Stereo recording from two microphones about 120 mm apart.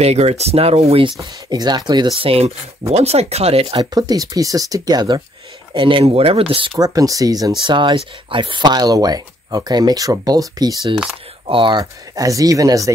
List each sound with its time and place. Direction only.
0.0 s speech: 60° right (ahead or behind)
1.5 s speech: 35° right (ahead or behind); by 3.8 s 55° right (ahead or behind)
3.9 s speech: 35° right (ahead or behind)
5.7 s speech: 45° right (ahead or behind)
6.8 s speech: 30° right (ahead or behind)
7.6 s speech: 40° right (ahead or behind)
11.4 s speech: 45° right (ahead or behind)
11.8 s speech: 30° right (ahead or behind)